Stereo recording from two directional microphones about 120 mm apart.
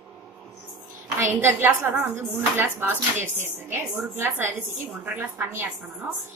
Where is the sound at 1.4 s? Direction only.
15° right (ahead or behind).